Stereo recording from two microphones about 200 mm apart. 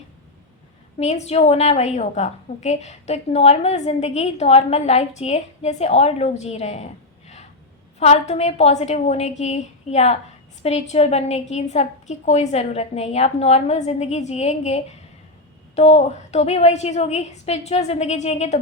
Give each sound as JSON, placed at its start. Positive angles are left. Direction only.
{"t": 0.9, "sound": "a woman's voice", "side_deg": 30}